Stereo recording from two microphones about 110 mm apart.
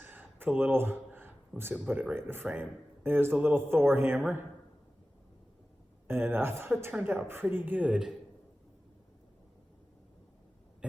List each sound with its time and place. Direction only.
0.0 s a sound: 15° right (ahead or behind)
1.9 s a man's voice: 15° right (ahead or behind)
6.1 s a man's voice: 20° right (ahead or behind)